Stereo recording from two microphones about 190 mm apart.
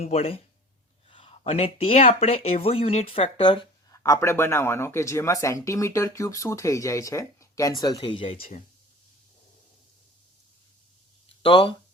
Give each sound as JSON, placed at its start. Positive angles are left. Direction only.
{"t": 0.0, "sound": "speech", "side_deg": 30}
{"t": 11.4, "sound": "speech", "side_deg": 25}